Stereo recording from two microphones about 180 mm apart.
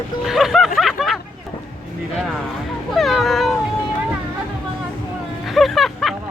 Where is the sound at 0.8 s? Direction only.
Centre (ahead or behind).